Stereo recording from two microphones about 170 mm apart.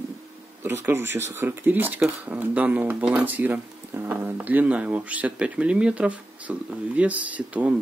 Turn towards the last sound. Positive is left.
turn(degrees=-10)  # may be behind; listen again after turning